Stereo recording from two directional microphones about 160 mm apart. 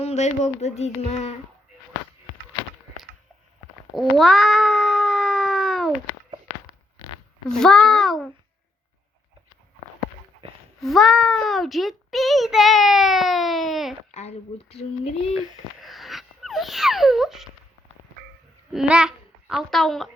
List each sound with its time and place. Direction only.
0.0 s speech: 45° left (ahead or behind)
3.9 s cat: centre (ahead or behind)
7.4 s a child's voice: 5° left (ahead or behind)
10.8 s a child's voice: centre (ahead or behind)
14.1 s speech: 45° left (ahead or behind)
15.8 s a sound: centre (ahead or behind)
18.7 s a child's voice: 5° right (ahead or behind)